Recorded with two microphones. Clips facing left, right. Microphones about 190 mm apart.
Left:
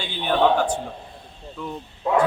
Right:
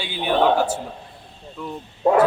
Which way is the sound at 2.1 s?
45° right (ahead or behind).